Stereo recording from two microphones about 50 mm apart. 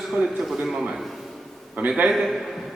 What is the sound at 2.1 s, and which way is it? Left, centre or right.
Speech, centre.